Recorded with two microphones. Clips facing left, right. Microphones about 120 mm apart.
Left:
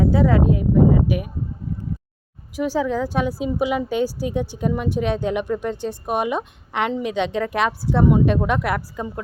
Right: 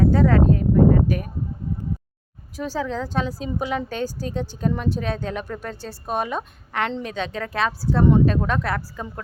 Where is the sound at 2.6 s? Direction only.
15° left (ahead or behind).